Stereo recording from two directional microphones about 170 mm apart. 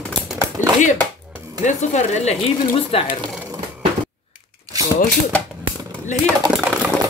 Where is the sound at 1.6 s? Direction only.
45° left (ahead or behind).